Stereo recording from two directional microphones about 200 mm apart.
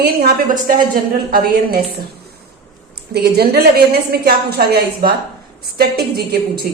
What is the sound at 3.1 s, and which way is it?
A woman's voice, 55° right (ahead or behind).